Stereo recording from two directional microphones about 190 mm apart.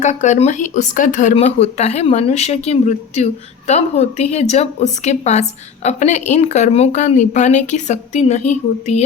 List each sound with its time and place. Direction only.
0.0 s a woman's voice: 40° left (ahead or behind)